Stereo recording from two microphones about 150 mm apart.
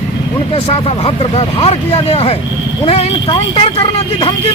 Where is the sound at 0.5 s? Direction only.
40° left (ahead or behind).